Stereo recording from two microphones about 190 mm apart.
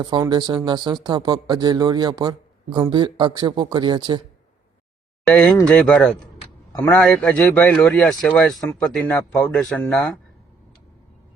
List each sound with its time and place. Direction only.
0.0 s speech: 20° right (ahead or behind)
5.2 s a man's voice: 5° left (ahead or behind)